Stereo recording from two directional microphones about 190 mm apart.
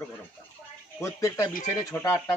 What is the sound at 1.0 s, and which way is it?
Speech, 15° left (ahead or behind).